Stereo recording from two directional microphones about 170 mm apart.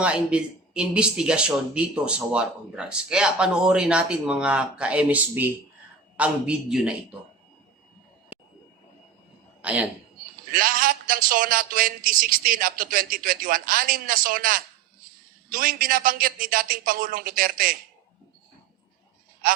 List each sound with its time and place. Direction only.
0.0 s a man's voice: 5° right (ahead or behind)
8.3 s vehicle: 5° right (ahead or behind)
9.6 s a woman's voice: 10° right (ahead or behind)
10.5 s a man's voice: 55° right (ahead or behind)